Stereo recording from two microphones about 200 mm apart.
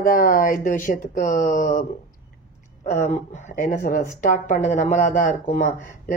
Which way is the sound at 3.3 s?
40° left (ahead or behind).